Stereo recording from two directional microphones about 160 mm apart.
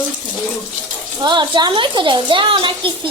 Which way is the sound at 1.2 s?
30° right (ahead or behind).